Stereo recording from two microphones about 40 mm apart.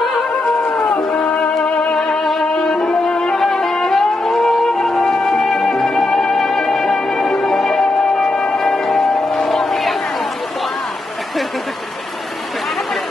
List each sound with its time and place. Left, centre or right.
0.0 s a sound: centre
1.4 s music: left
2.0 s music: centre